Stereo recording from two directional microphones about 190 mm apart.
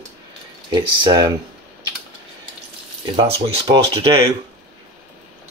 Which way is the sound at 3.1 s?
30° right (ahead or behind).